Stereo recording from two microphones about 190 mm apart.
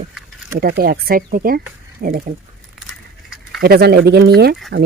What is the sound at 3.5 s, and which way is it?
Speech, 55° right (ahead or behind).